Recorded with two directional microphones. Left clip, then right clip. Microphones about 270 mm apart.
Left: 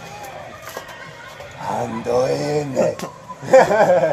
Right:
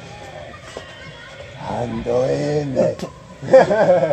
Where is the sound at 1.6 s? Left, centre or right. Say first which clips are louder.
Left 1 dB; left.